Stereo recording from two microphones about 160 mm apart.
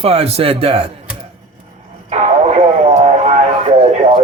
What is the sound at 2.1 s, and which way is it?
Radio, 45° right (ahead or behind).